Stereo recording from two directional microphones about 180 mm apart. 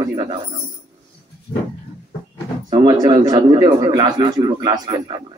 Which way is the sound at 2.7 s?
25° right (ahead or behind).